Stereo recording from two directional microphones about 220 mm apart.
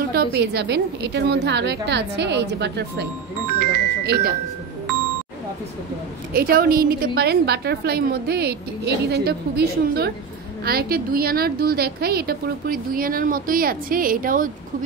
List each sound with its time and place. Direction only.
0.1 s a woman's voice: 45° right (ahead or behind)
6.3 s a woman's voice: 40° right (ahead or behind)